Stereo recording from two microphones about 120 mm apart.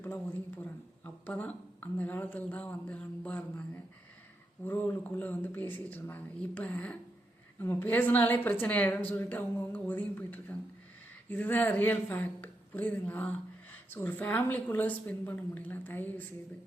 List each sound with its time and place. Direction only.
0.0 s speech: 15° left (ahead or behind)
4.6 s speech: 15° left (ahead or behind)